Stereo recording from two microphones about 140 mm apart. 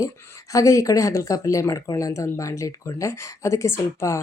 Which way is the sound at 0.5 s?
25° left (ahead or behind).